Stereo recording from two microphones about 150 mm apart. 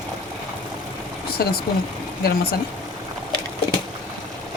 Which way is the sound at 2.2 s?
90° left.